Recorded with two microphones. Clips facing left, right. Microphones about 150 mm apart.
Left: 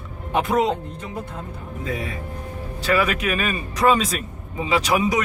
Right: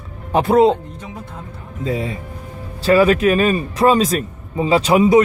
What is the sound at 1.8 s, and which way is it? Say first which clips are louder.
A man's voice: right 6 dB; 25° right (ahead or behind).